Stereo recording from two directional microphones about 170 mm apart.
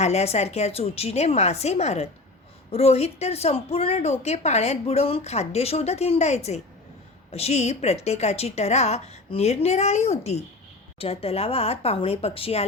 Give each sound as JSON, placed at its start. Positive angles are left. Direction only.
{"t": 0.0, "sound": "speech", "side_deg": 40}